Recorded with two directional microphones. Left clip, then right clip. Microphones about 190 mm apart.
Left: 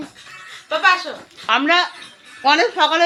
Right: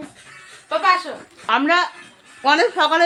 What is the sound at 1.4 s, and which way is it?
Speech, 5° right (ahead or behind).